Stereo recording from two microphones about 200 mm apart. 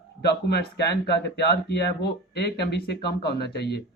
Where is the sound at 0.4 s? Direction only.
55° left (ahead or behind).